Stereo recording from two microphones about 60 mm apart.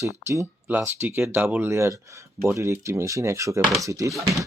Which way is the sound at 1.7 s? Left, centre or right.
Right.